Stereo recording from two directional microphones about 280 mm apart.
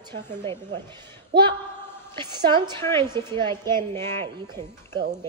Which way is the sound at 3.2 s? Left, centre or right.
Centre.